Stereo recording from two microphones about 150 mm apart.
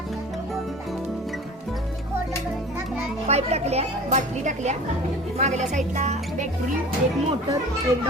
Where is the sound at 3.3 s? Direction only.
45° right (ahead or behind).